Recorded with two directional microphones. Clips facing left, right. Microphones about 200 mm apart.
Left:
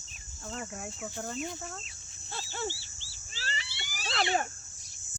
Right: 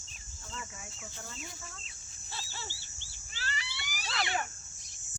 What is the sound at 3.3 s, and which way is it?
Cat, 30° left (ahead or behind).